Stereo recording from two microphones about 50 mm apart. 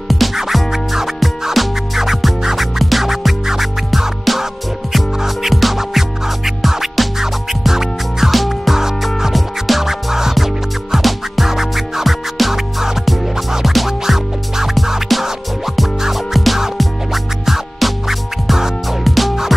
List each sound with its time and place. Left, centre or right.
0.1 s music: centre